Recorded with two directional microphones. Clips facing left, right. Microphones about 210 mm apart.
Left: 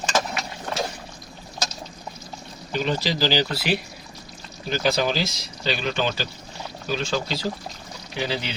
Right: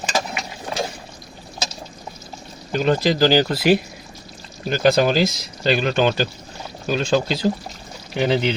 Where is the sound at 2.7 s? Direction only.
50° right (ahead or behind).